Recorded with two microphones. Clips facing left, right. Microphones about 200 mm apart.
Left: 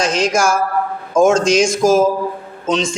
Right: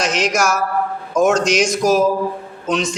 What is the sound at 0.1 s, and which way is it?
A man's voice, 30° left (ahead or behind).